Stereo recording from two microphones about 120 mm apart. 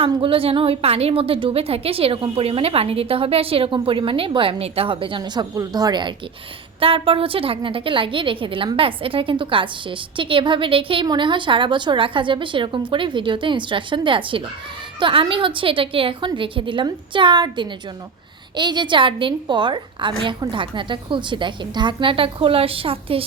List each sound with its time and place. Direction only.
0.2 s a woman's voice: 50° right (ahead or behind)
6.7 s a woman's voice: 50° right (ahead or behind)